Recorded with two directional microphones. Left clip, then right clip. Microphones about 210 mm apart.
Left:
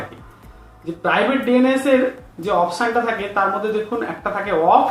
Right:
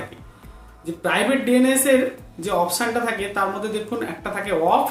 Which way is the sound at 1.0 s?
25° right (ahead or behind).